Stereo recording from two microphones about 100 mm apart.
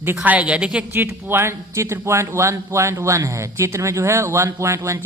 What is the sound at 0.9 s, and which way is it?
A man's voice, 25° right (ahead or behind).